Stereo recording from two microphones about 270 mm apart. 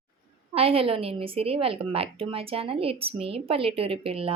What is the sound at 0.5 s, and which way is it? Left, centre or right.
A woman's voice, right.